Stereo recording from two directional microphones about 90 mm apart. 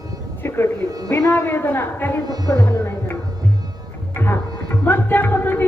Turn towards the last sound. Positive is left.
turn(degrees=25)  # may be behind; listen again after turning